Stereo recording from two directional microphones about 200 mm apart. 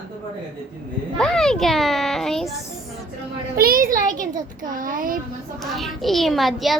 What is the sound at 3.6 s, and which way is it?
Speech, 45° right (ahead or behind).